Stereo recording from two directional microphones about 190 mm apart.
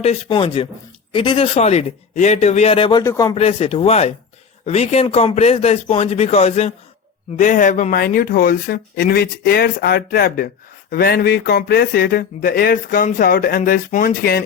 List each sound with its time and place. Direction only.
0.0 s speech: 30° left (ahead or behind)
3.3 s speech: 30° left (ahead or behind); by 14.4 s 50° left (ahead or behind)